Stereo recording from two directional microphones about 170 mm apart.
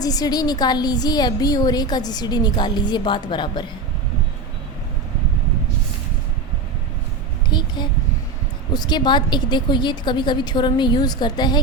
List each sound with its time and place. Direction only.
0.0 s a woman's voice: 20° left (ahead or behind)
7.5 s a sound: 25° left (ahead or behind)
8.7 s a woman's voice: 25° left (ahead or behind)